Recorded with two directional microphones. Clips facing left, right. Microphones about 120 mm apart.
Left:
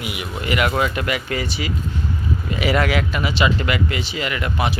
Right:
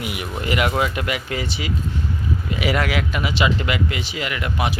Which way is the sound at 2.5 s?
10° right (ahead or behind).